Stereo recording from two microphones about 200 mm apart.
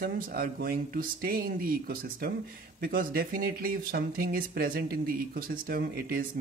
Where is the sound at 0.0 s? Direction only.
50° right (ahead or behind).